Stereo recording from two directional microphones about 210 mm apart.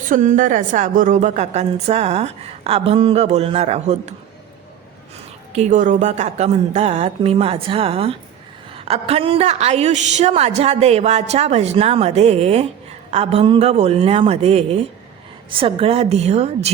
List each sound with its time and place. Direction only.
0.1 s a woman's voice: 35° right (ahead or behind)
5.5 s a woman's voice: 35° right (ahead or behind)